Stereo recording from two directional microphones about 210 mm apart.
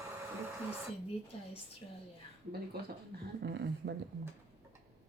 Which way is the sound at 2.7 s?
45° right (ahead or behind).